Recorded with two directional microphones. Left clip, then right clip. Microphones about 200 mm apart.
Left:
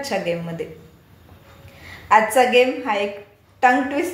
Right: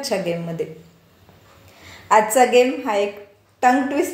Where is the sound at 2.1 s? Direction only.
45° right (ahead or behind).